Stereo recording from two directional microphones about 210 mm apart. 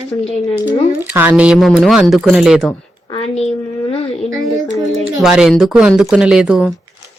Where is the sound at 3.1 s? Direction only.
30° left (ahead or behind).